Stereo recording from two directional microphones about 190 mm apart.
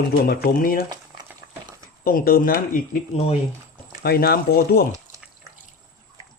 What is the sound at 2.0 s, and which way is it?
Speech, 50° left (ahead or behind).